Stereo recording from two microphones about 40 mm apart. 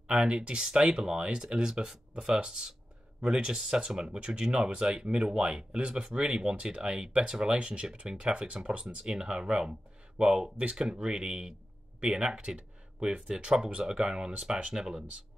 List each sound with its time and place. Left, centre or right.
0.1 s speech: right
9.0 s speech: centre
12.4 s speech: right
13.0 s speech: right